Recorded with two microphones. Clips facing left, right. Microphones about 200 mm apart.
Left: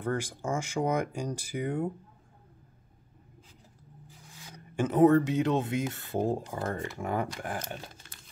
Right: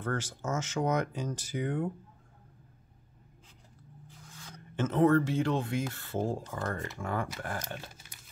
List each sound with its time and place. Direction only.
0.0 s speech: 15° left (ahead or behind)
4.3 s speech: 15° left (ahead or behind)
8.0 s a sound: 10° right (ahead or behind)